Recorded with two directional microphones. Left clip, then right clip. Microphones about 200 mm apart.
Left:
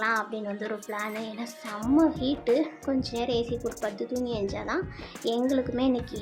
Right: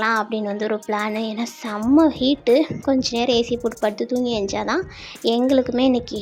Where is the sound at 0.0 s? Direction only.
30° right (ahead or behind).